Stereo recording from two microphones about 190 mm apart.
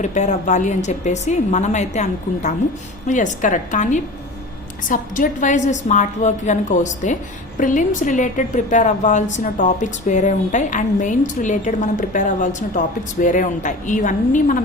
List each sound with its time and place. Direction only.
0.0 s a woman's voice: 40° left (ahead or behind)